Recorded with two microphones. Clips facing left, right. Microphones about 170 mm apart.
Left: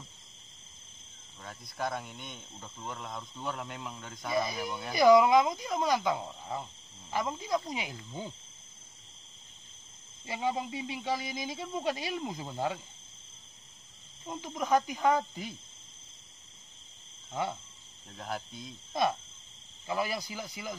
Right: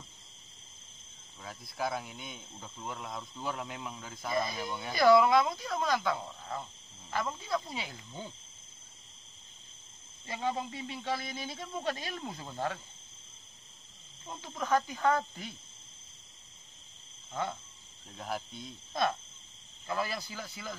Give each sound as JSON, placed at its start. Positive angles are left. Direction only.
{"t": 1.4, "sound": "speech", "side_deg": -5}
{"t": 4.3, "sound": "speech", "side_deg": 10}
{"t": 10.2, "sound": "speech", "side_deg": 15}
{"t": 14.2, "sound": "speech", "side_deg": 15}
{"t": 17.3, "sound": "cricket", "side_deg": 15}
{"t": 18.1, "sound": "speech", "side_deg": 0}
{"t": 19.9, "sound": "speech", "side_deg": 15}